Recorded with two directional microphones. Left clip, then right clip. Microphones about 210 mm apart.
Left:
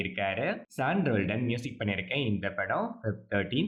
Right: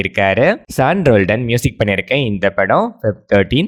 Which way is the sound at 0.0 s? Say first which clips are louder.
Right 18 dB; 50° right (ahead or behind).